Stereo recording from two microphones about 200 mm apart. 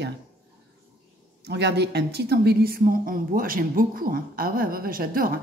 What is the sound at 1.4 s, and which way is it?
A woman's voice, 55° right (ahead or behind).